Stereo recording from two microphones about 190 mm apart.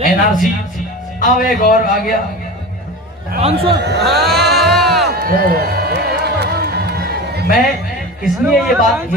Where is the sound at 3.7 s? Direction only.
60° right (ahead or behind).